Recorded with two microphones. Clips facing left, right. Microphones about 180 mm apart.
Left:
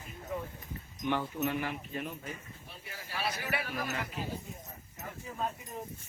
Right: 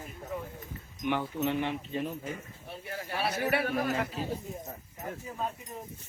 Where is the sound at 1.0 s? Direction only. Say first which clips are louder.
Right 2 dB; 15° right (ahead or behind).